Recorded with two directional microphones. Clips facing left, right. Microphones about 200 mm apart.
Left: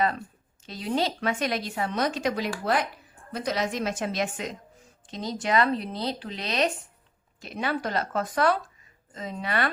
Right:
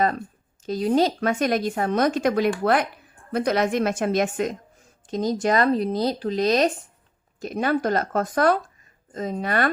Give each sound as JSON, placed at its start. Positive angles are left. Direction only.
{"t": 0.6, "sound": "a woman's voice", "side_deg": -45}